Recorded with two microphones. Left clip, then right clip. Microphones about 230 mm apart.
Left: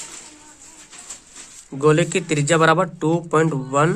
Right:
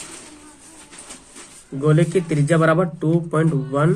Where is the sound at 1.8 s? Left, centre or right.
Left.